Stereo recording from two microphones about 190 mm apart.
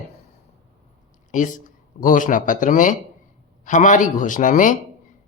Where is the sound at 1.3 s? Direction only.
45° left (ahead or behind).